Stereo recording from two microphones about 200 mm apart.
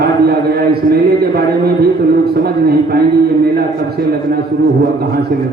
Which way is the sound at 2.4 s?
50° right (ahead or behind).